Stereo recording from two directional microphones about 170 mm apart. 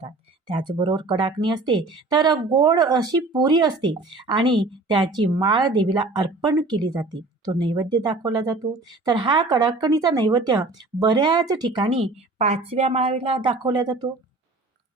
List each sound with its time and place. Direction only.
0.0 s speech: 30° right (ahead or behind)